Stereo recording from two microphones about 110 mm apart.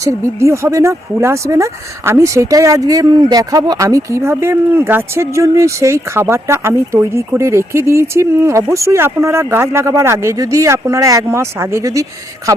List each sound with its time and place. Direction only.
0.0 s speech: 25° right (ahead or behind)